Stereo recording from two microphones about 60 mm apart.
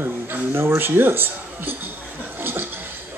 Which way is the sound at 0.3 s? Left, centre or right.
Right.